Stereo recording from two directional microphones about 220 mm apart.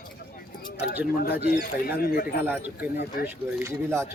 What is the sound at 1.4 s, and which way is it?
Speech, 45° left (ahead or behind).